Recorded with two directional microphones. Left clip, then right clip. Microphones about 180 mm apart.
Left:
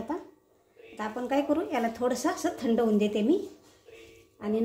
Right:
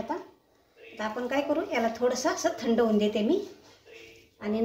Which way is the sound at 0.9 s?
55° left (ahead or behind).